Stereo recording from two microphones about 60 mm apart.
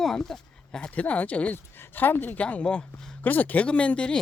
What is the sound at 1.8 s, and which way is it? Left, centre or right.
Speech, left.